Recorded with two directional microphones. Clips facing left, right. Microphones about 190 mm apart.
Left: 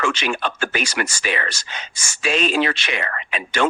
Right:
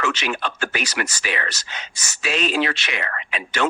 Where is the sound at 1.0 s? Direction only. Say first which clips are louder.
Left 2 dB; 30° left (ahead or behind).